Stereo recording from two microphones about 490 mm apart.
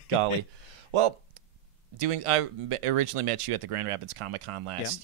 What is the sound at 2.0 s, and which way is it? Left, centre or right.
Speech, right.